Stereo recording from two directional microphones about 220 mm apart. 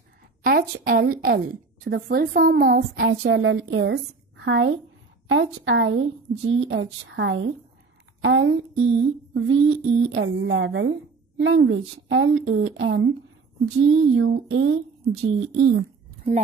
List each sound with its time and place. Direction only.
0.4 s a woman's voice: 45° right (ahead or behind); by 4.7 s 60° right (ahead or behind)
5.3 s a sound: 60° right (ahead or behind)
15.2 s a woman's voice: 50° right (ahead or behind)